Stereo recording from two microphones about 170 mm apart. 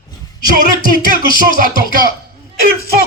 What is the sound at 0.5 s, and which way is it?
Music, 55° right (ahead or behind).